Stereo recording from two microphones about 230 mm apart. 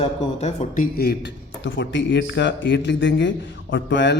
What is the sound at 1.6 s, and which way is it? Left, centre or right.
A man's voice, left.